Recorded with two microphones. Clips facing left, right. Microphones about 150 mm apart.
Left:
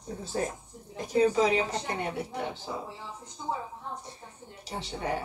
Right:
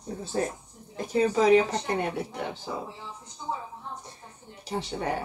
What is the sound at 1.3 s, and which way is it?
Speech, 45° right (ahead or behind).